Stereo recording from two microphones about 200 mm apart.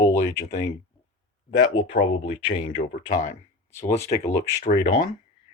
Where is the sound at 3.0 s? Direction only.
40° left (ahead or behind).